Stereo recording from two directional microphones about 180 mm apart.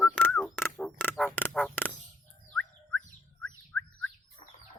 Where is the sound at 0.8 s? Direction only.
5° left (ahead or behind).